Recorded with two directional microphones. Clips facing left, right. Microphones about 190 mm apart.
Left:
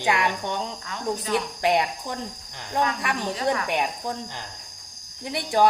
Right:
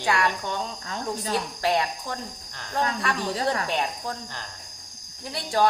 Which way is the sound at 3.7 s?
15° left (ahead or behind).